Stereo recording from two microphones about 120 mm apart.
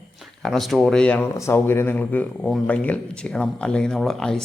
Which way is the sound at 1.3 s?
25° left (ahead or behind).